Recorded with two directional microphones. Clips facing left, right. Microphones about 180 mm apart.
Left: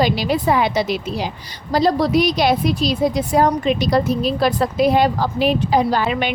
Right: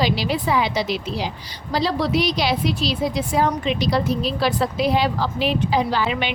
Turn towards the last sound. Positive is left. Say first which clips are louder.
# left 3 dB
turn(degrees=45)  # may be behind; listen again after turning